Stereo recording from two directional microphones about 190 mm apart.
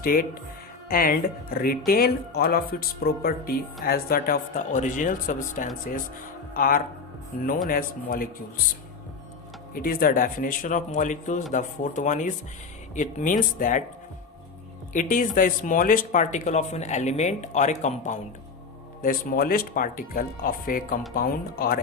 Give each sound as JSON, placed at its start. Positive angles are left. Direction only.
{"t": 0.0, "sound": "speech", "side_deg": 50}
{"t": 9.7, "sound": "speech", "side_deg": 50}
{"t": 14.9, "sound": "speech", "side_deg": 45}